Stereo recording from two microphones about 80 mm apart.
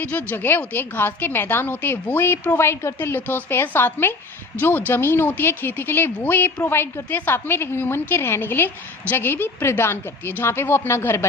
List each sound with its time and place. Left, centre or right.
0.0 s a woman's voice: left